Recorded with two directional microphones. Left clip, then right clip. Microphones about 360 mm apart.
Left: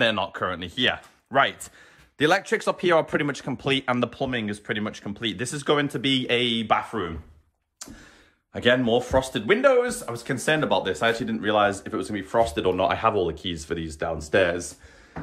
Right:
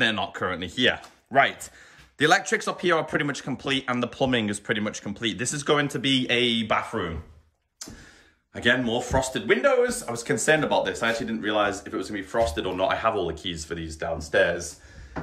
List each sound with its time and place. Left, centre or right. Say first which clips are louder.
0.0 s speech: left 1 dB; centre
7.8 s a sound: right 1 dB; centre
8.5 s speech: left 3 dB; centre